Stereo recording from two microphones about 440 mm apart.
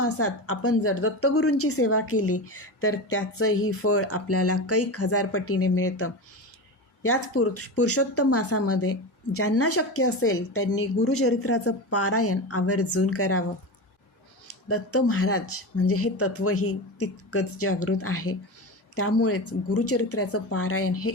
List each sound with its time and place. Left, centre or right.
0.0 s a woman's voice: left
14.4 s speech: left